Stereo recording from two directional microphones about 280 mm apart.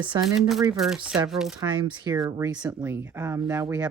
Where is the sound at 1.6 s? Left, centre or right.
Centre.